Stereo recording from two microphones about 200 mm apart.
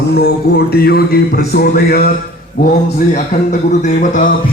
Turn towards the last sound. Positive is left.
turn(degrees=40)  # may be behind; listen again after turning